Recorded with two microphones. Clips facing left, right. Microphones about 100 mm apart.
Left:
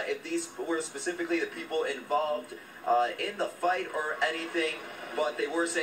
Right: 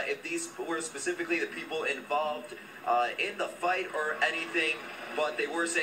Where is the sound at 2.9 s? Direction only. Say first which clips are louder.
Left 2 dB; 15° left (ahead or behind).